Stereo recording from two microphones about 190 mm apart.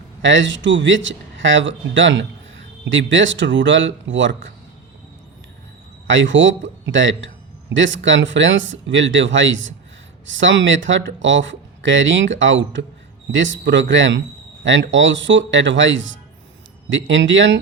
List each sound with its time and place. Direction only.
0.2 s speech: 75° right (ahead or behind)
6.1 s speech: 75° right (ahead or behind)